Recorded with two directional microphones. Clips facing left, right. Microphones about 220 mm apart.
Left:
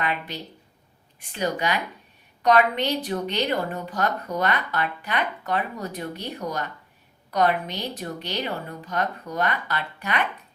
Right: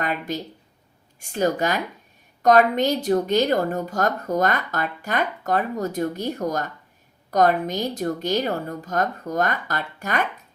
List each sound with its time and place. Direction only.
0.0 s a woman's voice: 45° right (ahead or behind)